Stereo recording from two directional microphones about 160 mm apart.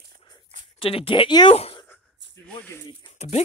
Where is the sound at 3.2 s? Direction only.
45° left (ahead or behind).